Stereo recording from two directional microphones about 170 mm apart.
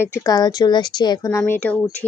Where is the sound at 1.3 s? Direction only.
15° left (ahead or behind).